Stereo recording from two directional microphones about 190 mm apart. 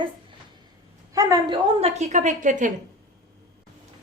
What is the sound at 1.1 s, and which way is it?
A woman's voice, 20° right (ahead or behind).